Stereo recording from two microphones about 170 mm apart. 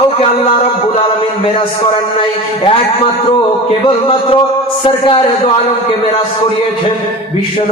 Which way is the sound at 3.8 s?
35° left (ahead or behind).